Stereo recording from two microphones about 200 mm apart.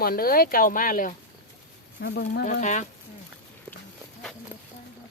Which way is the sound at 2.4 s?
40° left (ahead or behind).